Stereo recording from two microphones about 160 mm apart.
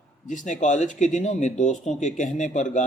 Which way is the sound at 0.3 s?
50° left (ahead or behind).